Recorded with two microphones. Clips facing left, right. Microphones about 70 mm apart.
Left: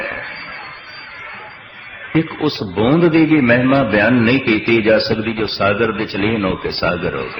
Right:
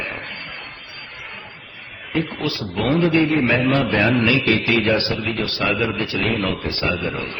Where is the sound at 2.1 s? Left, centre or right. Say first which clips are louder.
Left 6 dB; left.